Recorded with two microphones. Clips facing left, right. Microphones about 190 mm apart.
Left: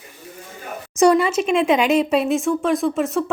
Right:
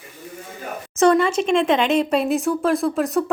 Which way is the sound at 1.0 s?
5° left (ahead or behind).